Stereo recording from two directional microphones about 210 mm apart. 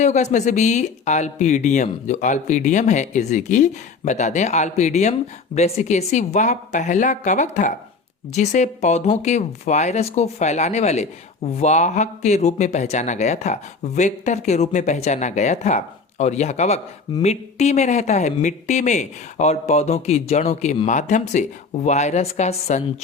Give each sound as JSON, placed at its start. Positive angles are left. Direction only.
{"t": 0.0, "sound": "speech", "side_deg": 35}